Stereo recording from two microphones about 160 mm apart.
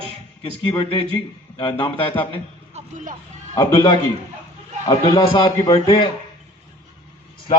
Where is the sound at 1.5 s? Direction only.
35° left (ahead or behind).